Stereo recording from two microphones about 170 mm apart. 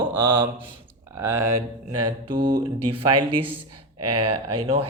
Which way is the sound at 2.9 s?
30° right (ahead or behind).